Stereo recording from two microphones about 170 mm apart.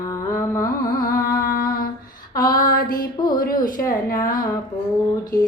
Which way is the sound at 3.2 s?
25° left (ahead or behind).